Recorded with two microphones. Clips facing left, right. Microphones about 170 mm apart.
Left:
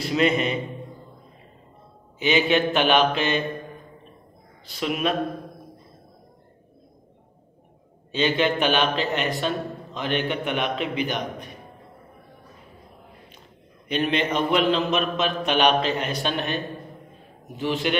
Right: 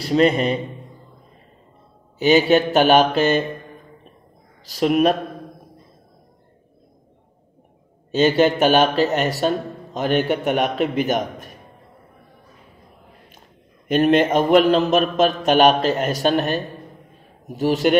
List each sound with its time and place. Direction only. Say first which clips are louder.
0.0 s speech: right 5 dB; 35° right (ahead or behind)
2.1 s speech: right 6 dB; 40° right (ahead or behind)
4.6 s speech: right 9 dB; 40° right (ahead or behind)
8.1 s speech: right 6 dB; 45° right (ahead or behind)
13.8 s speech: right 8 dB; 45° right (ahead or behind)